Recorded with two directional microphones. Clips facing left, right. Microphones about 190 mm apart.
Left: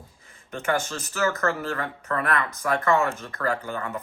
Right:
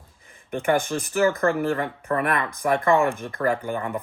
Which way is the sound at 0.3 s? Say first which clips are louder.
Right 4 dB; 15° right (ahead or behind).